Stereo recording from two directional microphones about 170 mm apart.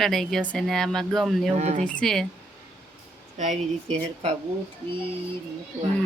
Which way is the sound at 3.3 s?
45° right (ahead or behind).